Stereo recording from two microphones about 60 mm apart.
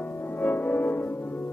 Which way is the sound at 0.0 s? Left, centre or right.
Left.